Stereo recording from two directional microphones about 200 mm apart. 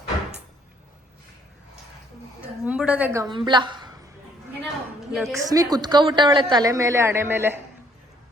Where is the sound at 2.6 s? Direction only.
5° right (ahead or behind); by 3.9 s 20° right (ahead or behind).